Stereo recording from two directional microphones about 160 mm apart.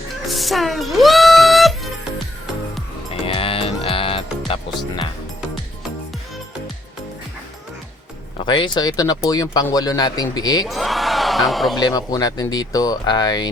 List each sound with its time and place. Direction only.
0.3 s music: centre (ahead or behind)
3.1 s music: 35° left (ahead or behind)
8.4 s speech: 30° left (ahead or behind)
10.7 s a sound: centre (ahead or behind)
11.8 s speech: 25° left (ahead or behind)